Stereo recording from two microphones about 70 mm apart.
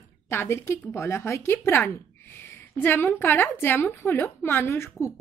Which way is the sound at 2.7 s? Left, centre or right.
Left.